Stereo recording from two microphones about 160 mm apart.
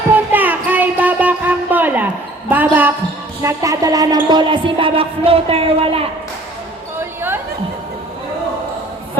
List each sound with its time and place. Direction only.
0.3 s child singing: 10° right (ahead or behind)
2.5 s speech: 10° right (ahead or behind)
3.4 s music: 20° right (ahead or behind); by 6.0 s 35° right (ahead or behind)